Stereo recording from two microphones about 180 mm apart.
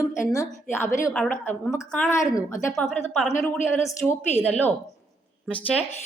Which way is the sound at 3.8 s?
10° left (ahead or behind).